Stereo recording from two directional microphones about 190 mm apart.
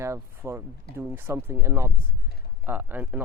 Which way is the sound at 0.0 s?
15° right (ahead or behind).